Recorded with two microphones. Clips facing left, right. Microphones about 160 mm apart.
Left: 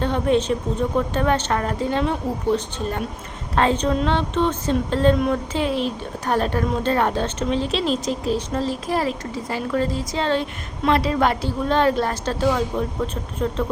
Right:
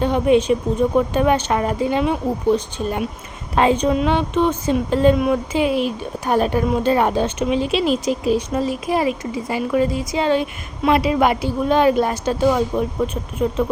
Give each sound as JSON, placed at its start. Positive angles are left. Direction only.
{"t": 0.0, "sound": "speech", "side_deg": -10}